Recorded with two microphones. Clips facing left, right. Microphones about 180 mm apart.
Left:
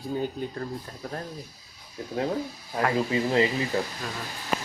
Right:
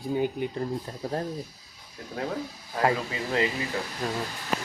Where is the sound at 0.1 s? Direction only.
15° right (ahead or behind).